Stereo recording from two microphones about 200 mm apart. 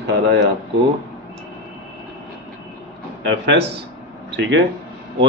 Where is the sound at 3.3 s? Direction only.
60° right (ahead or behind).